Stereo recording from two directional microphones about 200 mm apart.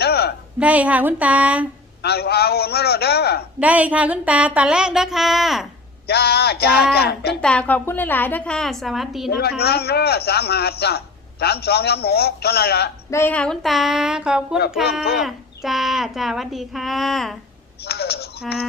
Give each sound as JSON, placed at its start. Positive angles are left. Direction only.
{"t": 0.0, "sound": "a sound", "side_deg": 55}
{"t": 0.6, "sound": "speech", "side_deg": -5}
{"t": 2.0, "sound": "a man's voice", "side_deg": 55}
{"t": 3.6, "sound": "a child's voice", "side_deg": -5}
{"t": 6.1, "sound": "a man's voice", "side_deg": 55}
{"t": 7.4, "sound": "a child's voice", "side_deg": 5}
{"t": 9.6, "sound": "a man's voice", "side_deg": 50}
{"t": 13.1, "sound": "a child's voice", "side_deg": 10}
{"t": 17.8, "sound": "a man's voice", "side_deg": 55}